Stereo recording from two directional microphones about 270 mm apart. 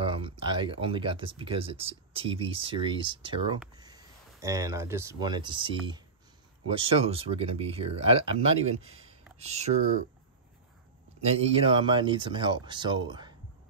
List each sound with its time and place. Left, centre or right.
0.0 s speech: centre
11.4 s speech: centre